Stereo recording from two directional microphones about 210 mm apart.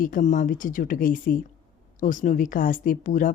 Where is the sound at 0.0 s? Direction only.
40° left (ahead or behind).